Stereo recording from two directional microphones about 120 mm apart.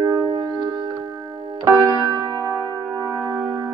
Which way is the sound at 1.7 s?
25° right (ahead or behind).